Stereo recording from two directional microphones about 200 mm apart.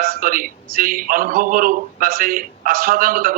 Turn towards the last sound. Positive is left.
turn(degrees=-45)  # may be behind; listen again after turning